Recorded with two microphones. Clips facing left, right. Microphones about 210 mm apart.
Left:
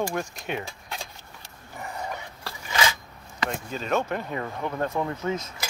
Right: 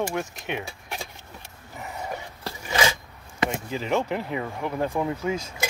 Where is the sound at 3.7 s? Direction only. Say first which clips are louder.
Left 1 dB; 15° right (ahead or behind).